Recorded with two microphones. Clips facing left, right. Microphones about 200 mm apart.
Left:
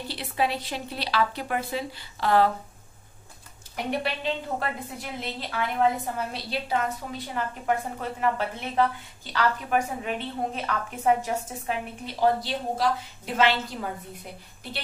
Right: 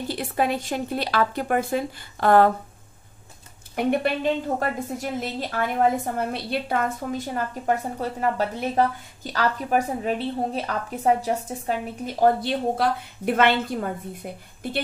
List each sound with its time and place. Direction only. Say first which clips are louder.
0.1 s speech: right 3 dB; 50° right (ahead or behind)
3.7 s a woman's voice: right 7 dB; 50° right (ahead or behind)
12.4 s a woman's voice: right 5 dB; 55° right (ahead or behind)